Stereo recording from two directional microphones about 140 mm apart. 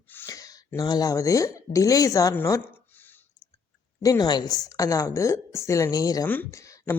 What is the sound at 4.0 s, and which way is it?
Speech, 25° left (ahead or behind).